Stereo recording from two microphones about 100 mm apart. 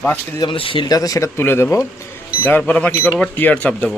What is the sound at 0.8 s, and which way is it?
Speech, 35° left (ahead or behind).